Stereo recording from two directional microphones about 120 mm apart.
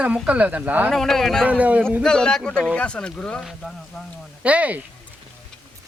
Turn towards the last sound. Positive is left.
turn(degrees=-10)  # may be behind; listen again after turning